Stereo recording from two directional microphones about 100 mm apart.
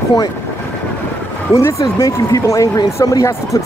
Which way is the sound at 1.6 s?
30° left (ahead or behind).